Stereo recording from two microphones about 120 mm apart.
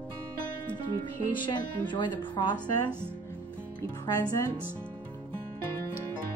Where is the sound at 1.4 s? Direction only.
40° left (ahead or behind).